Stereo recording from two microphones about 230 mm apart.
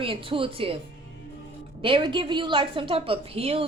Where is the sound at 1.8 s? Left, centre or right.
Right.